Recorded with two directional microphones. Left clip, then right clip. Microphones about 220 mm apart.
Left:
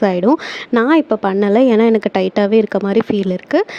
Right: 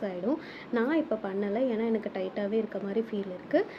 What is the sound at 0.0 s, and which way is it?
Speech, 45° left (ahead or behind).